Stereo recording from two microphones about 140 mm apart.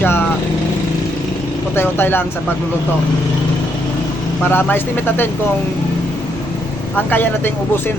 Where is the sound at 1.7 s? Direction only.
15° left (ahead or behind).